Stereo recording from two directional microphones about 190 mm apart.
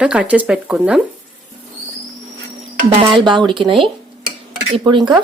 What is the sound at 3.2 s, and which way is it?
Speech, 25° right (ahead or behind).